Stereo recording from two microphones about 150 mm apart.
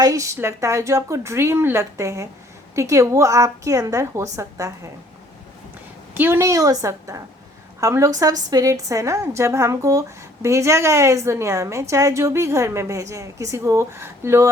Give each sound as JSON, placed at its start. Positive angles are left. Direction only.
{"t": 0.0, "sound": "a woman's voice", "side_deg": -20}
{"t": 6.1, "sound": "a woman's voice", "side_deg": -15}